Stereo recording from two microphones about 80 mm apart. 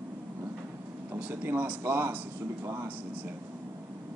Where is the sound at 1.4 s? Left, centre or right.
Right.